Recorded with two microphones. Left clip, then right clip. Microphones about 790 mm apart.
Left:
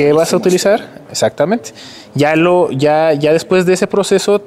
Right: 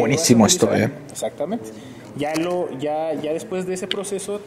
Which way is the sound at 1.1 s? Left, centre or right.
Left.